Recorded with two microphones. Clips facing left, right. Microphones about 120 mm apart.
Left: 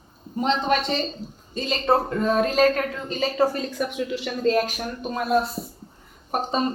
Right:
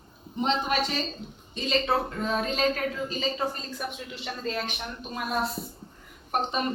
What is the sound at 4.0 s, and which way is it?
Speech, 90° left.